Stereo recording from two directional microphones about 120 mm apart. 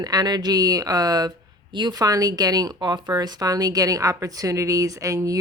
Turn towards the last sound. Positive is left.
turn(degrees=-25)  # may be behind; listen again after turning